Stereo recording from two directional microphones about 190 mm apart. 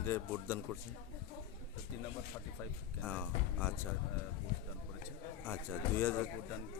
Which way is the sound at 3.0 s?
5° left (ahead or behind).